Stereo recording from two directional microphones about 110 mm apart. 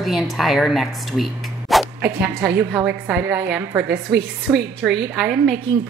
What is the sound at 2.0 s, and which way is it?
A woman's voice, 15° right (ahead or behind).